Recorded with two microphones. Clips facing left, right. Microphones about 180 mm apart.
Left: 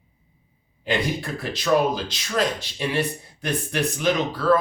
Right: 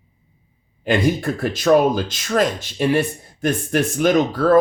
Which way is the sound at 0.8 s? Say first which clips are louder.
Right 7 dB; 50° right (ahead or behind).